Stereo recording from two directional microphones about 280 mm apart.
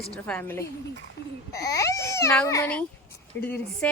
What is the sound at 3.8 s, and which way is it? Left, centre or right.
Speech, centre.